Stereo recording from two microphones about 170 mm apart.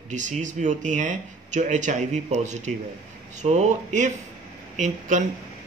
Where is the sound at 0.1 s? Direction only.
45° right (ahead or behind).